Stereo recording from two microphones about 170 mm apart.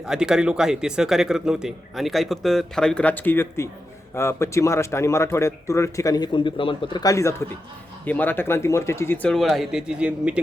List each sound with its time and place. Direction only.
0.0 s a man's voice: 5° right (ahead or behind)